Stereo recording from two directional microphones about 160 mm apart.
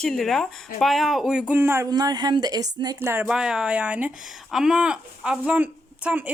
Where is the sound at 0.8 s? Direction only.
Centre (ahead or behind).